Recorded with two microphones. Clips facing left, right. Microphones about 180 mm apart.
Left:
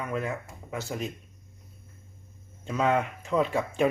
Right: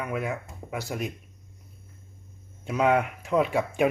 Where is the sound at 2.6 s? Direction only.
10° right (ahead or behind).